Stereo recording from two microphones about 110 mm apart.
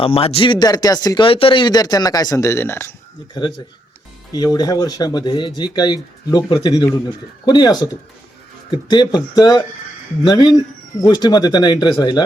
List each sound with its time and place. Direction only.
0.0 s speech: 65° left (ahead or behind); by 1.3 s 40° left (ahead or behind)
1.3 s speech: 55° left (ahead or behind); by 2.9 s 20° left (ahead or behind)
4.3 s speech: 35° left (ahead or behind)